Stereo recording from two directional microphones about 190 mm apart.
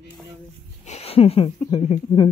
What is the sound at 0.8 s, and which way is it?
Speech, 35° left (ahead or behind).